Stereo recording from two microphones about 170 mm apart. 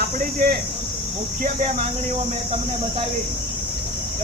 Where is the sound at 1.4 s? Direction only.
45° right (ahead or behind).